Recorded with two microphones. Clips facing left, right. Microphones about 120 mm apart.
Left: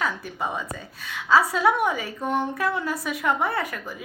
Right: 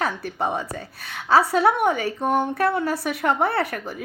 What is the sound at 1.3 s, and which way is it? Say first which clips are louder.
A woman's voice: right 2 dB; 65° right (ahead or behind).